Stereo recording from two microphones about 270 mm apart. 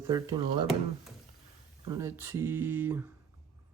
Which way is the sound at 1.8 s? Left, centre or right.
Centre.